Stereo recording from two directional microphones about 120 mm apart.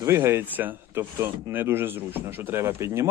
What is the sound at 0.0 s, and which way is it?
Speech, 25° right (ahead or behind).